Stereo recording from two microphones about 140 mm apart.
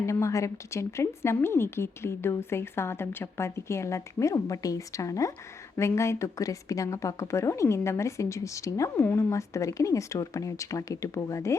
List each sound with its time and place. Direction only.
0.0 s a woman's voice: 20° left (ahead or behind)